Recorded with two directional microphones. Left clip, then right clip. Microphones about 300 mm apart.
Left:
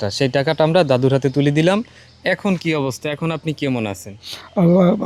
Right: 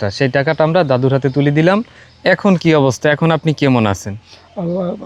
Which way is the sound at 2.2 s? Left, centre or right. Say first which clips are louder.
Right 7 dB; centre.